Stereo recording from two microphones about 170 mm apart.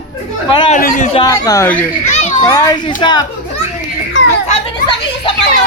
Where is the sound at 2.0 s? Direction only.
45° left (ahead or behind).